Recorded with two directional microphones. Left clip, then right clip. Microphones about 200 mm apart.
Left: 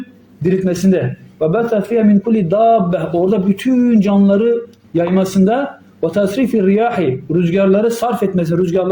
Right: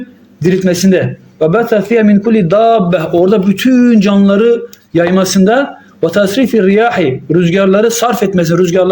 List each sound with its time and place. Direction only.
0.4 s a man's voice: 15° right (ahead or behind)